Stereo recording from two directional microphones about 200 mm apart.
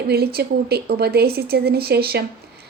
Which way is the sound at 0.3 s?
50° right (ahead or behind).